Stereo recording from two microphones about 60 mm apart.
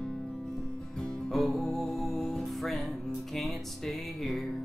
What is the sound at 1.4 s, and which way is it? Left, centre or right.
Music, centre.